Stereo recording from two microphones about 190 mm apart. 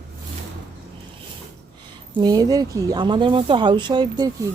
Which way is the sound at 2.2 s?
20° right (ahead or behind).